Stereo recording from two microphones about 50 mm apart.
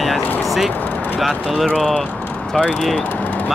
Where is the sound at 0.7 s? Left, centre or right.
Left.